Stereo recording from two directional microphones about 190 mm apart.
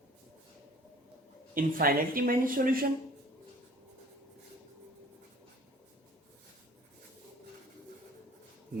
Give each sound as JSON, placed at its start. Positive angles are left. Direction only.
{"t": 1.5, "sound": "speech", "side_deg": -50}